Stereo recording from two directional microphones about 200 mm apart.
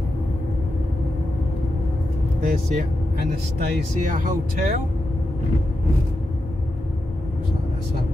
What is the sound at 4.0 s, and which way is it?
Speech, 40° right (ahead or behind).